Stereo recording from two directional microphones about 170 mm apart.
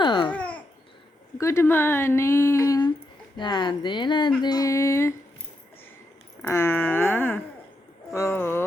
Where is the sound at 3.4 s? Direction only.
25° left (ahead or behind).